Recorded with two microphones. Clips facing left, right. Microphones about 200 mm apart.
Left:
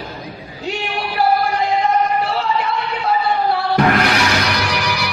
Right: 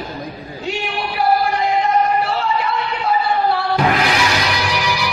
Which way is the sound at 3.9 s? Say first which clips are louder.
Left 1 dB; 50° left (ahead or behind).